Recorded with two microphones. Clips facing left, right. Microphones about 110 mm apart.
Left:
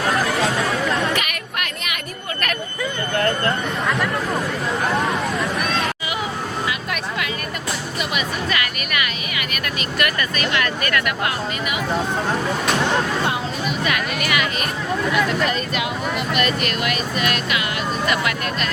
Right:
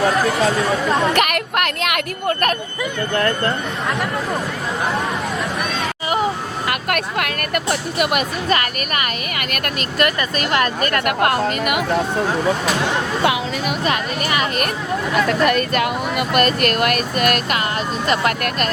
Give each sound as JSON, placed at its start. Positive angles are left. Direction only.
{"t": 1.1, "sound": "a sound", "side_deg": -60}
{"t": 6.7, "sound": "speech", "side_deg": -60}
{"t": 8.4, "sound": "speech", "side_deg": -40}
{"t": 11.0, "sound": "speech", "side_deg": -55}
{"t": 13.2, "sound": "speech", "side_deg": -90}
{"t": 13.8, "sound": "speech", "side_deg": -35}
{"t": 15.3, "sound": "speech", "side_deg": -55}